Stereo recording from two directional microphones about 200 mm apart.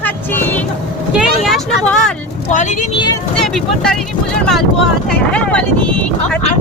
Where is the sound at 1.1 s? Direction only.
Centre (ahead or behind).